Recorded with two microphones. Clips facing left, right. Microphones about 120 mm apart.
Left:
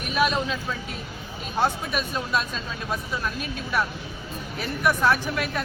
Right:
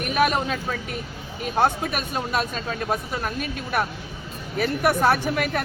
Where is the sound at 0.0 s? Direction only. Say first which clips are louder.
Right 2 dB; 55° right (ahead or behind).